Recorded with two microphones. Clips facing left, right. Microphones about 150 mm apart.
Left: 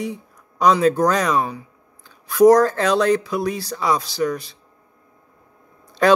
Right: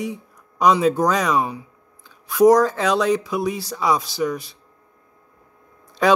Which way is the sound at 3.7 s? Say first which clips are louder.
Right 1 dB; 5° right (ahead or behind).